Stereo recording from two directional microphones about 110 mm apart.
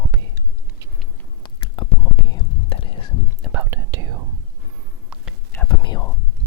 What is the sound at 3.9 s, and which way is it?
Whispering, 30° right (ahead or behind).